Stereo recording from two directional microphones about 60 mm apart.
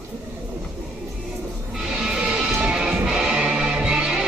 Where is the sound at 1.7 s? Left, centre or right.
Centre.